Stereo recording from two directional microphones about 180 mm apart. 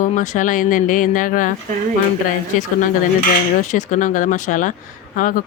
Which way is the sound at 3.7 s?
45° left (ahead or behind).